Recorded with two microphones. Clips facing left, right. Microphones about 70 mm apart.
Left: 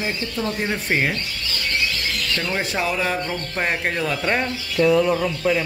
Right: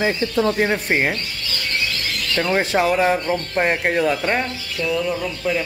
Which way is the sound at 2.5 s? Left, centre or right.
Right.